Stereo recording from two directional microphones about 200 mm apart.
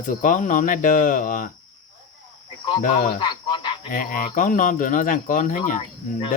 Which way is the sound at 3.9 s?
40° left (ahead or behind).